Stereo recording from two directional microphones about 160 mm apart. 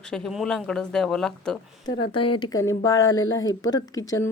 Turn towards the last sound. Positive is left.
turn(degrees=20)  # may be behind; listen again after turning